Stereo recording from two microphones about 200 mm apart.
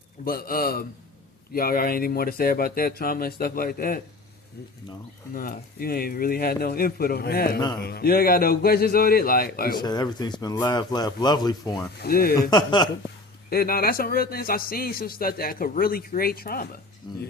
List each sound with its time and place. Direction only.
0.3 s a man's voice: 45° left (ahead or behind)
5.3 s a man's voice: 45° left (ahead or behind)
9.8 s speech: 20° left (ahead or behind)
11.9 s a man's voice: 50° left (ahead or behind)
12.4 s speech: 20° left (ahead or behind)
13.5 s a man's voice: 50° left (ahead or behind)